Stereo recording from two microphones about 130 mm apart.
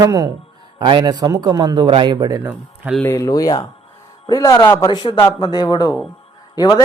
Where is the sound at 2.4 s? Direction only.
15° right (ahead or behind).